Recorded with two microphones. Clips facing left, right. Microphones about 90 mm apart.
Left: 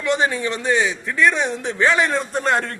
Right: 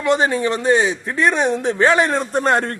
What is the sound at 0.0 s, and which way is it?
Speech, 35° right (ahead or behind).